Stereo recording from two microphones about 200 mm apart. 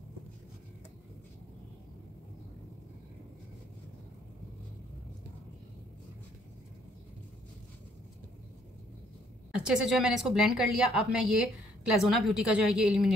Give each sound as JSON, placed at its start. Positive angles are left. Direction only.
{"t": 9.5, "sound": "a woman's voice", "side_deg": -5}